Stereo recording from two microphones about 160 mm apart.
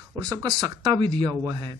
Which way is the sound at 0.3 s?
25° right (ahead or behind).